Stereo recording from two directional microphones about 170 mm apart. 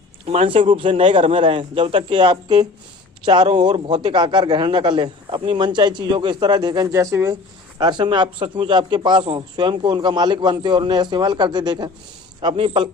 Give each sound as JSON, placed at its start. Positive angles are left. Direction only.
{"t": 0.3, "sound": "a man's voice", "side_deg": -35}